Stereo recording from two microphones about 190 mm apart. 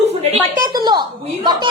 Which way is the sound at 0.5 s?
20° right (ahead or behind).